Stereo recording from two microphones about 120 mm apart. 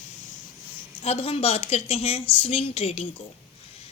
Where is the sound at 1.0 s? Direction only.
55° left (ahead or behind).